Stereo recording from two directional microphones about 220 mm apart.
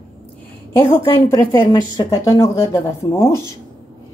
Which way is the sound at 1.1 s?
15° left (ahead or behind).